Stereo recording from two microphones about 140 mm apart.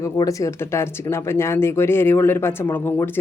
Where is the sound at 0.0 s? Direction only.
25° left (ahead or behind).